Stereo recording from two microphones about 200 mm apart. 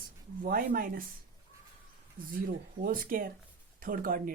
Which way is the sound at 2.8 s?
45° right (ahead or behind).